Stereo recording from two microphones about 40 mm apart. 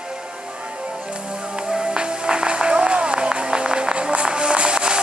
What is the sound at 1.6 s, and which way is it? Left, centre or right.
Music, right.